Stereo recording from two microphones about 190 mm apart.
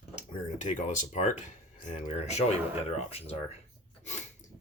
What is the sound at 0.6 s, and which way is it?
Speech, 40° left (ahead or behind).